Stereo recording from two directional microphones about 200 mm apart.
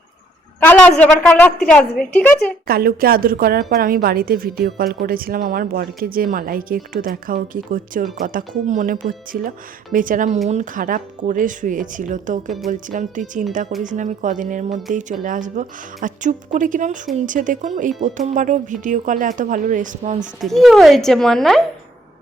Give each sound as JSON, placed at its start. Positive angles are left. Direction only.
{"t": 0.6, "sound": "a woman's voice", "side_deg": 5}
{"t": 2.6, "sound": "a woman's voice", "side_deg": -50}
{"t": 20.4, "sound": "speech", "side_deg": 0}